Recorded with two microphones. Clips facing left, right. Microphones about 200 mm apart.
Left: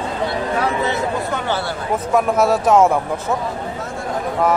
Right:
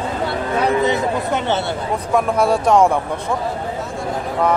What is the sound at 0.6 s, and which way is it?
Speech, 20° right (ahead or behind).